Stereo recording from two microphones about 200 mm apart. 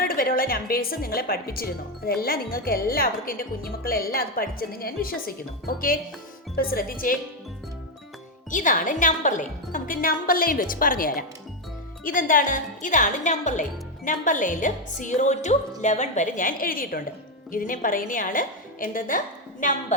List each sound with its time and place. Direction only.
0.0 s a woman's voice: 45° left (ahead or behind)
8.4 s a woman's voice: 40° left (ahead or behind)